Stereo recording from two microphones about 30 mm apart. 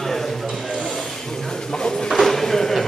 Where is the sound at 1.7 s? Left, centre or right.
Left.